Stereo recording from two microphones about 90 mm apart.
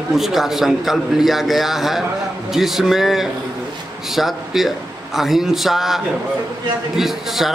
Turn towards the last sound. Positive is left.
turn(degrees=0)  # may be behind; listen again after turning